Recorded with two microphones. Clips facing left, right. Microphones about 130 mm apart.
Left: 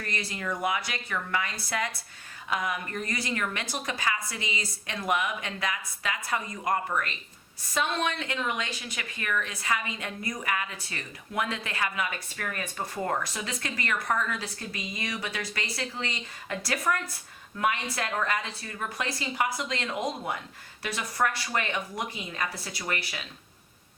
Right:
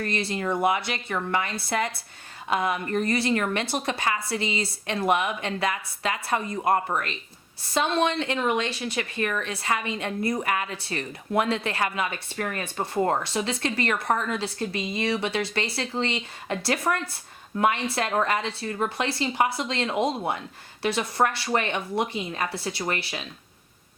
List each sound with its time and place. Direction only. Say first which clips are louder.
0.0 s speech: right 7 dB; 25° right (ahead or behind)